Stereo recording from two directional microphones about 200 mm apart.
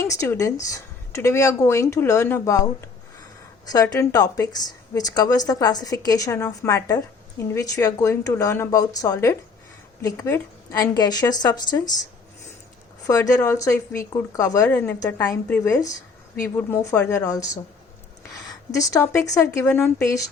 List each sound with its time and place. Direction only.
0.0 s a woman's voice: 15° left (ahead or behind)
13.1 s a woman's voice: 15° left (ahead or behind)
18.4 s a sound: 15° left (ahead or behind)
19.3 s a woman's voice: 15° left (ahead or behind)